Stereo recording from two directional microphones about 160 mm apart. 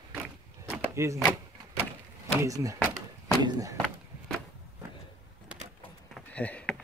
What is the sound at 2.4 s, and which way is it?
Speech, 20° right (ahead or behind).